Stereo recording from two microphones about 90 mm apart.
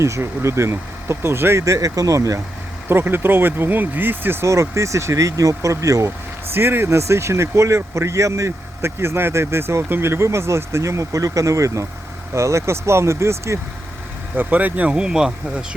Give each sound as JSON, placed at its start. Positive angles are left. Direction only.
{"t": 0.0, "sound": "speech", "side_deg": -35}
{"t": 2.9, "sound": "speech", "side_deg": -25}
{"t": 6.5, "sound": "speech", "side_deg": -25}
{"t": 14.3, "sound": "speech", "side_deg": -20}